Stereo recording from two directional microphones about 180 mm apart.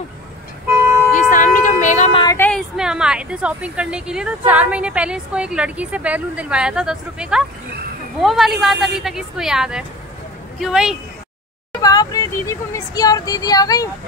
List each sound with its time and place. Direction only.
1.3 s music: 45° left (ahead or behind)
2.2 s a sound: 10° left (ahead or behind)
2.7 s a woman's voice: 5° right (ahead or behind)
11.8 s speech: 20° left (ahead or behind)